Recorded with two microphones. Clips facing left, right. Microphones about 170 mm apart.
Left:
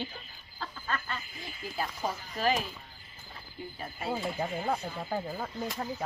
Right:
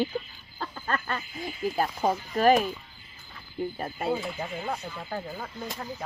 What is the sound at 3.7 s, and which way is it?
Speech, 55° right (ahead or behind).